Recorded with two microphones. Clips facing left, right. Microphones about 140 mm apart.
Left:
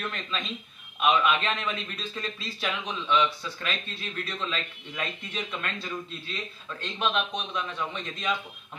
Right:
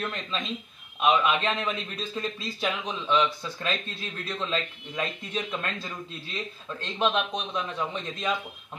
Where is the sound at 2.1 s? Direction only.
15° right (ahead or behind).